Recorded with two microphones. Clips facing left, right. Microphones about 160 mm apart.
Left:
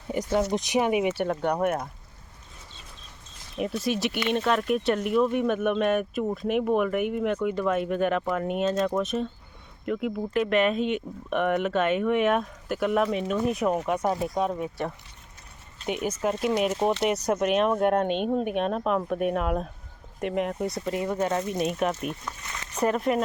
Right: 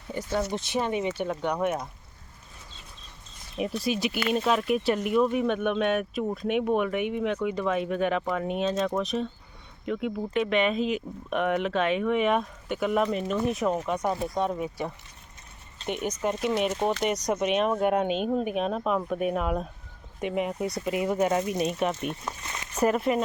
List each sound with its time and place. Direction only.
0.1 s speech: 20° left (ahead or behind)
3.6 s speech: centre (ahead or behind)
20.9 s speech: 15° right (ahead or behind)
21.5 s speech: centre (ahead or behind)
22.3 s speech: 25° right (ahead or behind)
22.7 s speech: 10° right (ahead or behind)